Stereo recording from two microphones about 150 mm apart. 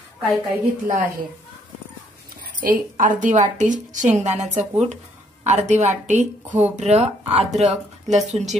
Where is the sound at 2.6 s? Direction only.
65° right (ahead or behind).